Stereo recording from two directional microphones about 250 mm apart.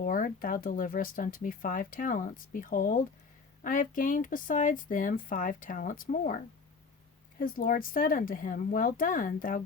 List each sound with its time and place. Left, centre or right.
0.0 s speech: left